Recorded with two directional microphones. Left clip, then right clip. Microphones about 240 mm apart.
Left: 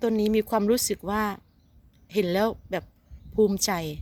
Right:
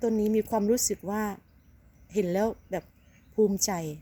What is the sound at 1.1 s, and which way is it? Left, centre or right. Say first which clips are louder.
Speech: left 5 dB; centre.